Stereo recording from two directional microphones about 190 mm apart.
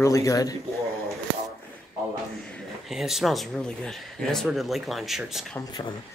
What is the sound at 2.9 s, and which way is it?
Speech, centre (ahead or behind).